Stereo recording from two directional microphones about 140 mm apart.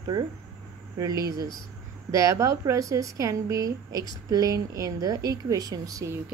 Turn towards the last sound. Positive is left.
turn(degrees=-25)  # may be behind; listen again after turning